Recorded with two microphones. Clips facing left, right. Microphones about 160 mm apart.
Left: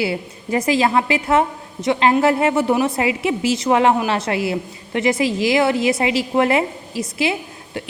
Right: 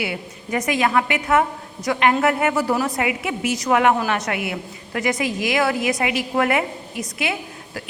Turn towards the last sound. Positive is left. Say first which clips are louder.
# left 3 dB
turn(degrees=25)  # may be behind; listen again after turning